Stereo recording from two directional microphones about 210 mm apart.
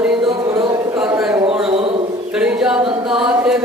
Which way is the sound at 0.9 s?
5° right (ahead or behind).